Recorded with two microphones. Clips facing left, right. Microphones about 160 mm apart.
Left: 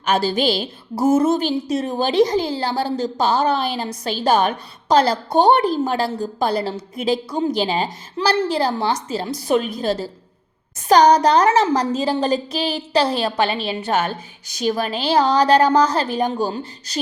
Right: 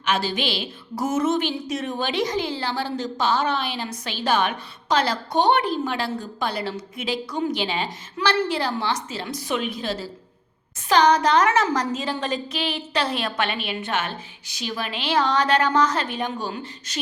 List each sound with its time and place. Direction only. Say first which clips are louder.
0.0 s a woman's voice: left 6 dB; 40° left (ahead or behind)